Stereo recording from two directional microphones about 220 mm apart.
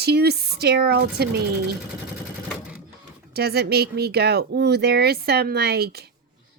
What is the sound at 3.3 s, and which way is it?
Speech, 45° right (ahead or behind).